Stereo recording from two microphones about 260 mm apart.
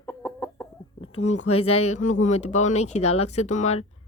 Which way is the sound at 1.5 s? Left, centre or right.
Left.